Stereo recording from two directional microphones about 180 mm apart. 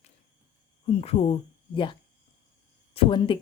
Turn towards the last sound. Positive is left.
turn(degrees=30)  # may be behind; listen again after turning